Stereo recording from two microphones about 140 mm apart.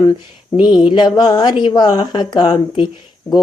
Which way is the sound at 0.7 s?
35° left (ahead or behind).